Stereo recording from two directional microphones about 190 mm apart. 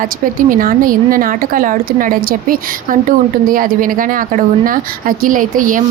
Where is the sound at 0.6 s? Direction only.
45° right (ahead or behind).